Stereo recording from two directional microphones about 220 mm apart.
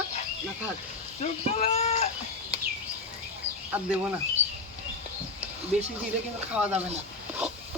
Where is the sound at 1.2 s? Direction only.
30° left (ahead or behind).